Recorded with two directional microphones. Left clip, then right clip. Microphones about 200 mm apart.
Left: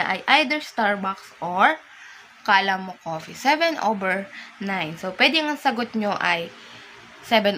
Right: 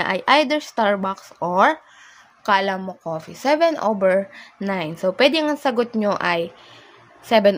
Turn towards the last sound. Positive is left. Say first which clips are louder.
# right 3 dB
turn(degrees=-55)  # may be behind; listen again after turning